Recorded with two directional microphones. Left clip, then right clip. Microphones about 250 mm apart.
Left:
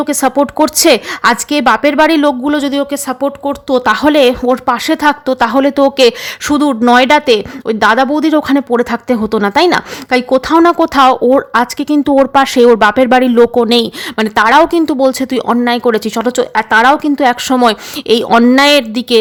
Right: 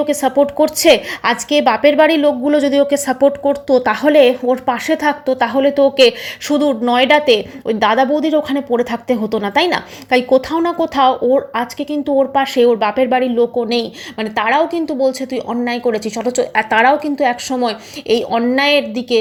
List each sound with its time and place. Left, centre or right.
0.0 s a woman's voice: centre